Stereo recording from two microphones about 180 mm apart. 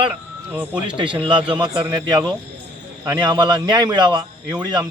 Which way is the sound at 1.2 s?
25° right (ahead or behind).